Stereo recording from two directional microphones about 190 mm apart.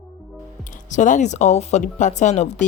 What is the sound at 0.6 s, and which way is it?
Speech, 40° left (ahead or behind).